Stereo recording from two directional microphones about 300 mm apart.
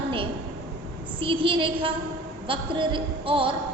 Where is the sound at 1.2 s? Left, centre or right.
Centre.